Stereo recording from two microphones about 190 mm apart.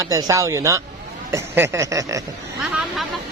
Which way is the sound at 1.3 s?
15° right (ahead or behind).